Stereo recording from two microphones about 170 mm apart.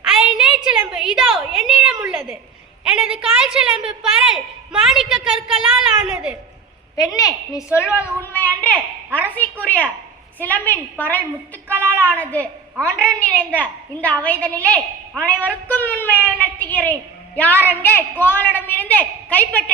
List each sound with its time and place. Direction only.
0.0 s a sound: 5° right (ahead or behind)
2.8 s a woman's voice: 5° right (ahead or behind)
7.2 s a woman's voice: 20° left (ahead or behind)